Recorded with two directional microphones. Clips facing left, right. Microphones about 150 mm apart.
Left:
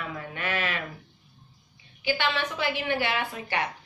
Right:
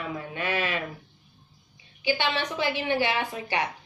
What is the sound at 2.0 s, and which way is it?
A woman's voice, 20° right (ahead or behind).